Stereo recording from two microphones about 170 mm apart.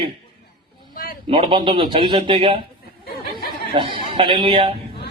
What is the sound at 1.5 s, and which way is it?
Speech, 30° right (ahead or behind).